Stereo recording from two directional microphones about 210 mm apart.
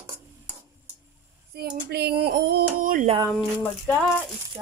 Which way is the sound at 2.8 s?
40° right (ahead or behind).